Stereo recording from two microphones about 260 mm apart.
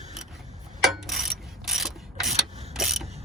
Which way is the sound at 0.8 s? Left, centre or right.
Centre.